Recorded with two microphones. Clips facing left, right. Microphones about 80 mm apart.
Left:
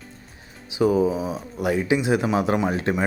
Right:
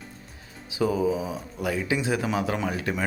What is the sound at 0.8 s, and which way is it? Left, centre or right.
Speech, left.